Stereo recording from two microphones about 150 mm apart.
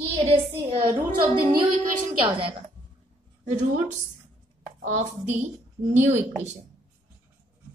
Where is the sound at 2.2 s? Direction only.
35° right (ahead or behind).